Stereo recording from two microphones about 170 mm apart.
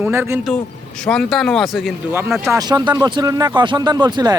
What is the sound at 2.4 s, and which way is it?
Speech, 20° right (ahead or behind).